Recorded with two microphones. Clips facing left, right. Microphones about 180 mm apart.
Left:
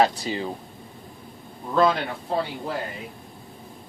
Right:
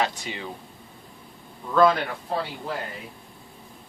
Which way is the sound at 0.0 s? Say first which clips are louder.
Left 6 dB; 35° left (ahead or behind).